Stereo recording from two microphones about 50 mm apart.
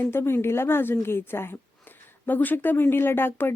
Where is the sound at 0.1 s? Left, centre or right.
Left.